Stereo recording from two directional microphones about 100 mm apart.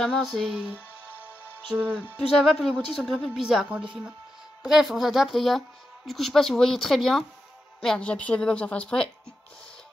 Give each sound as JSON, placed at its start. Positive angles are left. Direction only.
{"t": 0.0, "sound": "a woman's voice", "side_deg": 0}